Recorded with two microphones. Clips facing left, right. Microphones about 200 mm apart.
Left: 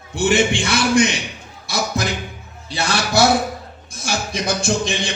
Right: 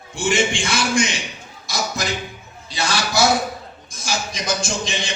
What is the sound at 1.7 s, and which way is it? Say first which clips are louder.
Music: left 3 dB; 60° left (ahead or behind).